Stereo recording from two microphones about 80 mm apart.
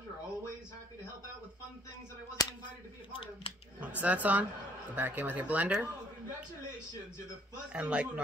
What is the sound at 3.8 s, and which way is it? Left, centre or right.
Speech, centre.